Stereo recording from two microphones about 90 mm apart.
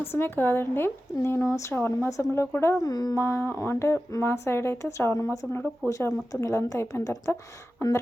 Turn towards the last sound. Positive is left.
turn(degrees=30)  # may be behind; listen again after turning